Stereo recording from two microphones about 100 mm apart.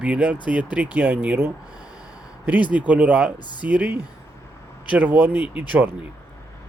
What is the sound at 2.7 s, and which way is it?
Speech, 15° right (ahead or behind).